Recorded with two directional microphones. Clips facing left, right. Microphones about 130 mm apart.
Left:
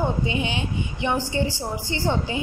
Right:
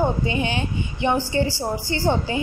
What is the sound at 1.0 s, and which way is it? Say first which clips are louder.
A woman's voice: right 3 dB; 35° right (ahead or behind).